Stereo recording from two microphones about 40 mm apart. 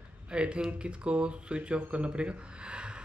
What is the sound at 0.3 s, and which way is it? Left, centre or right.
Speech, right.